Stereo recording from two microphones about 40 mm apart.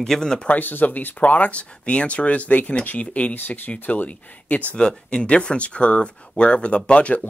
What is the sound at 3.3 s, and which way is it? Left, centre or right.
Speech, left.